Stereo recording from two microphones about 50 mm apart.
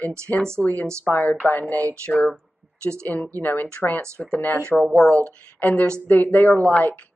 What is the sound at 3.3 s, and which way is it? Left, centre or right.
Speech, left.